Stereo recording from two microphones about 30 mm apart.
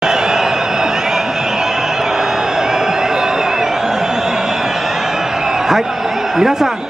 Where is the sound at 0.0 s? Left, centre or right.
Centre.